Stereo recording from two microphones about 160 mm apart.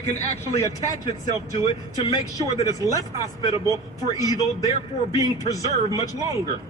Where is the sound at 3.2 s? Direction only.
20° right (ahead or behind).